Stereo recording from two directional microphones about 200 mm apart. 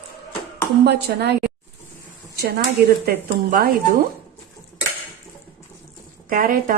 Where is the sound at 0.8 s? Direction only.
55° right (ahead or behind).